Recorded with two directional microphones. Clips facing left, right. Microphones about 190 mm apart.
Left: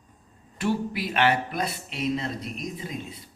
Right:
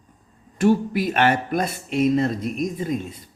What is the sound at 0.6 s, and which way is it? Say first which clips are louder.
Speech: right 8 dB; 45° right (ahead or behind).